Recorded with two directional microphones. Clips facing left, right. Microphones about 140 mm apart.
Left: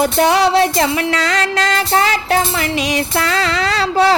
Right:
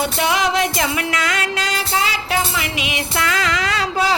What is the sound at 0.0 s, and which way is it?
Music, 40° left (ahead or behind).